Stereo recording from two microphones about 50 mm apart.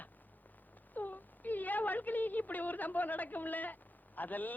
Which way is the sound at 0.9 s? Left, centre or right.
Left.